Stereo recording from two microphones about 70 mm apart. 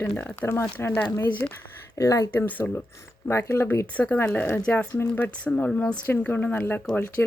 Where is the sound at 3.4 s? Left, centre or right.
Left.